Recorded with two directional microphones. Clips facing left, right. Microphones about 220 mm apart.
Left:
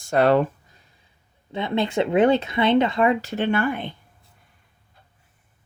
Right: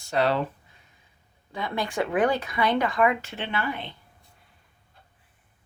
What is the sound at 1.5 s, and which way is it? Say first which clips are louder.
Speech: left 6 dB; 25° left (ahead or behind).